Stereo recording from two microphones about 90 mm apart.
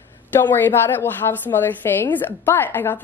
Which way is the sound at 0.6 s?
20° left (ahead or behind).